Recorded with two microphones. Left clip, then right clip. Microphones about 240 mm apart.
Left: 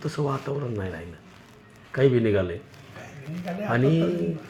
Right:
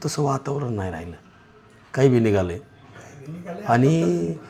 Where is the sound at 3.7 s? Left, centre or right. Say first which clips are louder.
Right 5 dB; right.